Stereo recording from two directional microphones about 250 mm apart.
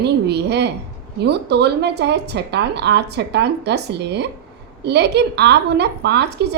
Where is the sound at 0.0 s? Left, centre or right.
Right.